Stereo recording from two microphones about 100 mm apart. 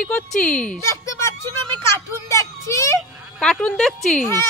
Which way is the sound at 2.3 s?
30° left (ahead or behind).